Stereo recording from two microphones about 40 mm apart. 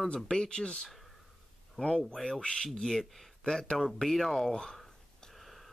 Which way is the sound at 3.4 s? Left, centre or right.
Centre.